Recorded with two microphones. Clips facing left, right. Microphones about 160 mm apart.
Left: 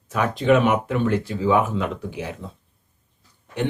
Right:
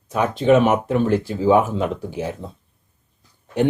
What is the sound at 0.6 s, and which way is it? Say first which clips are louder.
Speech: right 3 dB; 45° right (ahead or behind).